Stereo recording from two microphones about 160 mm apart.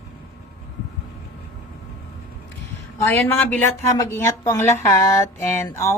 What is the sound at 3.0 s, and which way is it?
Speech, 15° left (ahead or behind).